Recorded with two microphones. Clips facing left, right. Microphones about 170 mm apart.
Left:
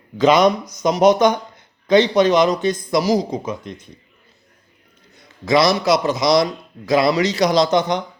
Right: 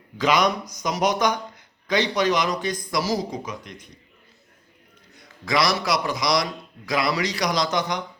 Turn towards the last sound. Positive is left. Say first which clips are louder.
# left 8 dB
turn(degrees=25)  # may be behind; listen again after turning